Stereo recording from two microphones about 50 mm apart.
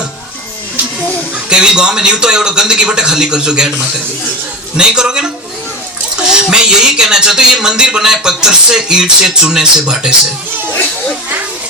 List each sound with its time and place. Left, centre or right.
1.5 s speech: centre